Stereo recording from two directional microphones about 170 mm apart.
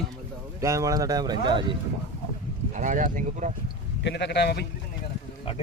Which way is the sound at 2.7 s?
50° right (ahead or behind).